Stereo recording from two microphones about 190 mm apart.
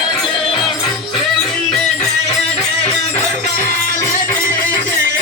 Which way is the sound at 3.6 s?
45° left (ahead or behind).